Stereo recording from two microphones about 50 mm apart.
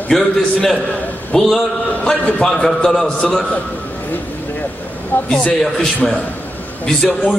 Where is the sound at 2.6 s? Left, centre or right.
Centre.